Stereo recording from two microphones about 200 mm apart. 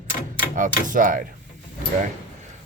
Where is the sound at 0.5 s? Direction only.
40° right (ahead or behind).